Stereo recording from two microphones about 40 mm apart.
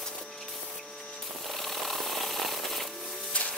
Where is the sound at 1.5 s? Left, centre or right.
Centre.